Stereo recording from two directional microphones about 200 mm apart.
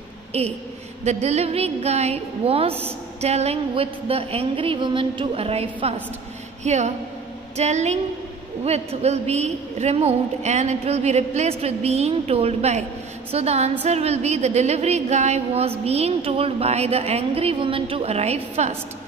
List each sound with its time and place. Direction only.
0.3 s a woman's voice: 30° right (ahead or behind)
3.2 s a sound: 30° right (ahead or behind)
6.6 s a woman's voice: 35° right (ahead or behind)